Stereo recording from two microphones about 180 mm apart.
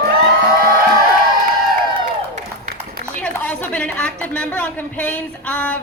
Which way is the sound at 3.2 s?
5° left (ahead or behind).